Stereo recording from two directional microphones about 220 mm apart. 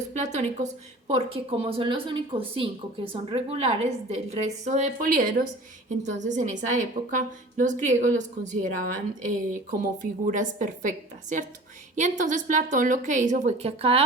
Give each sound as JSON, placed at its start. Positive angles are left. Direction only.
{"t": 0.1, "sound": "a woman's voice", "side_deg": -30}
{"t": 9.2, "sound": "a woman's voice", "side_deg": -35}